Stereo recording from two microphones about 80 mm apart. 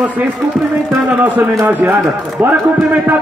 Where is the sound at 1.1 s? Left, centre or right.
Right.